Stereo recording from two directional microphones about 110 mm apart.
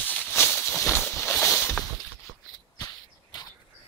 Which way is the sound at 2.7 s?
35° left (ahead or behind).